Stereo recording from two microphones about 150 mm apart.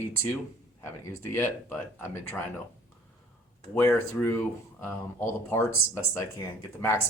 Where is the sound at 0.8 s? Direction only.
15° left (ahead or behind).